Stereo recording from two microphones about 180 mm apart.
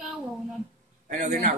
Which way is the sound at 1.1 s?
45° right (ahead or behind).